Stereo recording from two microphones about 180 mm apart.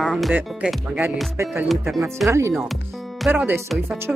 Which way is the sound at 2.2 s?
15° right (ahead or behind).